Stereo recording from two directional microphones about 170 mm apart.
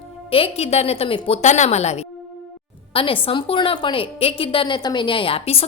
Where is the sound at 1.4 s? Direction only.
45° left (ahead or behind).